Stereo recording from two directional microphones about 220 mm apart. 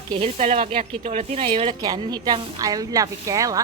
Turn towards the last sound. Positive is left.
turn(degrees=-15)  # may be behind; listen again after turning